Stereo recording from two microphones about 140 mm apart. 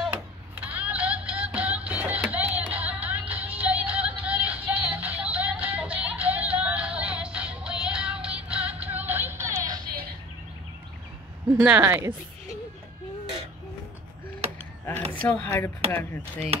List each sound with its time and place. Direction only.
0.1 s music: 10° right (ahead or behind)
11.6 s speech: 10° right (ahead or behind)
15.1 s speech: 15° left (ahead or behind)